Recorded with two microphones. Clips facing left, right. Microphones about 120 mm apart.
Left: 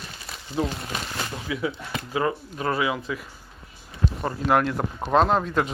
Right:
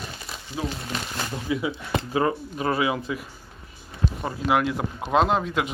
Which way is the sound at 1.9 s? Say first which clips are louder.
Right 4 dB; 30° right (ahead or behind).